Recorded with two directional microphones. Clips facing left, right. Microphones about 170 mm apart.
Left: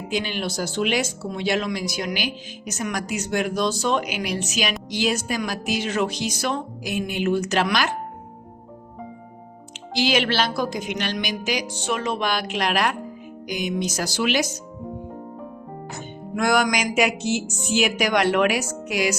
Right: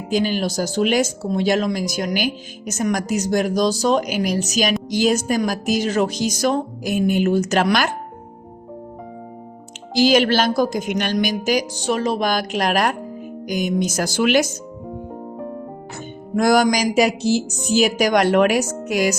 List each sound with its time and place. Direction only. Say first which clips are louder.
0.1 s a woman's voice: right 7 dB; 40° right (ahead or behind)
9.9 s a woman's voice: right 6 dB; 40° right (ahead or behind)
16.3 s a woman's voice: right 5 dB; 35° right (ahead or behind)